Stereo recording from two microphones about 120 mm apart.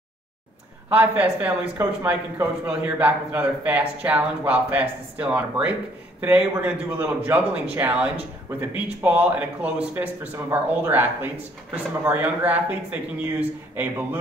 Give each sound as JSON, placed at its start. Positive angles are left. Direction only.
{"t": 0.8, "sound": "a man's voice", "side_deg": -15}